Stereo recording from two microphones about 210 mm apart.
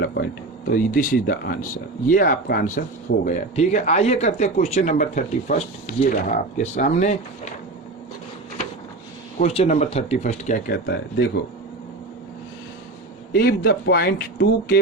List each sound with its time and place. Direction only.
0.0 s speech: 50° left (ahead or behind); by 7.5 s 35° left (ahead or behind)
9.5 s speech: 30° left (ahead or behind)
10.7 s speech: 55° left (ahead or behind)
13.3 s speech: 45° left (ahead or behind)